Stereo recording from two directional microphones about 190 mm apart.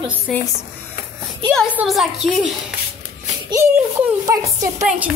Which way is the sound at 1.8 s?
Centre (ahead or behind).